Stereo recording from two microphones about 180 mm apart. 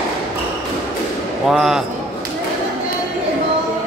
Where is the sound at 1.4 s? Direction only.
Centre (ahead or behind).